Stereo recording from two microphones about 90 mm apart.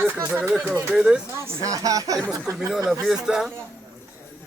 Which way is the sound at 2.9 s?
5° right (ahead or behind).